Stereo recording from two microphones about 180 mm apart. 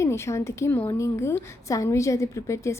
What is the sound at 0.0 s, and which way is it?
A woman's voice, 15° left (ahead or behind).